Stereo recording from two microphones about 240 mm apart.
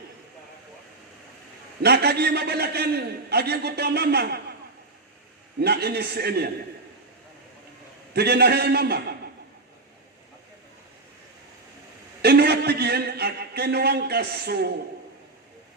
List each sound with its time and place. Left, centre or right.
1.8 s a man's voice: right
5.5 s a man's voice: right
8.1 s a man's voice: right
12.2 s a man's voice: right